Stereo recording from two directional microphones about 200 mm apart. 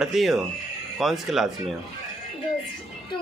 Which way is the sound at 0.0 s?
Centre (ahead or behind).